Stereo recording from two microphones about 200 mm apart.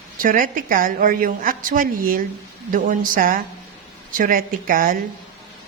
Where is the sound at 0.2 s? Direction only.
45° right (ahead or behind).